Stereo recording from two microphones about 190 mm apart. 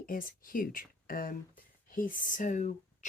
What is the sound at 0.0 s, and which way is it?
Speech, 45° left (ahead or behind).